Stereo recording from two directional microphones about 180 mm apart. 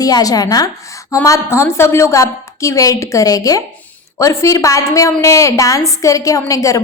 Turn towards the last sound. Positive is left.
turn(degrees=15)  # may be behind; listen again after turning